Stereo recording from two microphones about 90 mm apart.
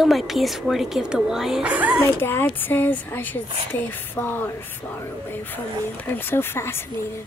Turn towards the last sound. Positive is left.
turn(degrees=25)  # may be behind; listen again after turning